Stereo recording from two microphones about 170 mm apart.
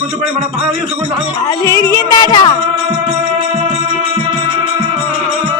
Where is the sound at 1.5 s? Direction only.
15° left (ahead or behind).